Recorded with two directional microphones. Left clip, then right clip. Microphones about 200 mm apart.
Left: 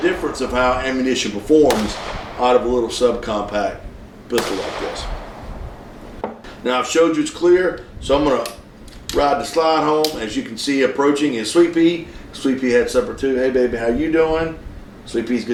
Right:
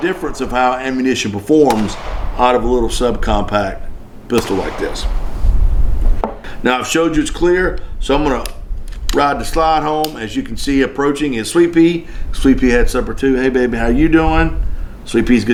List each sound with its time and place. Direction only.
0.0 s speech: 40° right (ahead or behind)
6.6 s speech: 40° right (ahead or behind)